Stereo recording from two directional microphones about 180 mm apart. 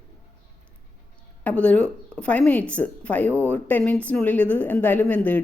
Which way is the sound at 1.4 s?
10° left (ahead or behind).